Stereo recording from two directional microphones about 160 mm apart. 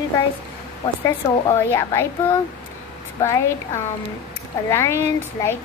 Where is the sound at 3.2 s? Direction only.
15° left (ahead or behind).